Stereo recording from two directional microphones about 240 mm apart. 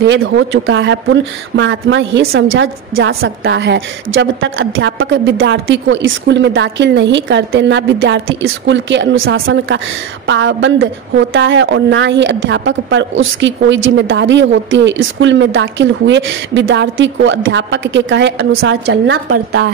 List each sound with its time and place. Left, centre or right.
0.0 s a woman's voice: right
3.4 s a woman's voice: right